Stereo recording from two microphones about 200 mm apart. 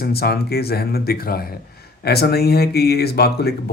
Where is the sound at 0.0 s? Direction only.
50° left (ahead or behind).